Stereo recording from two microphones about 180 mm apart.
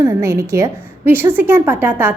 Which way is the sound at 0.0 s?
15° right (ahead or behind).